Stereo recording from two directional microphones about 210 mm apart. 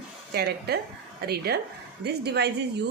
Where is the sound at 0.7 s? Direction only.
50° right (ahead or behind).